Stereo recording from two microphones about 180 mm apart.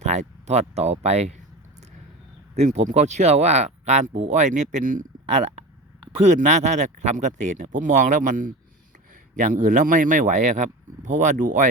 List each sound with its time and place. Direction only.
0.0 s speech: 40° right (ahead or behind)
2.6 s speech: 40° right (ahead or behind)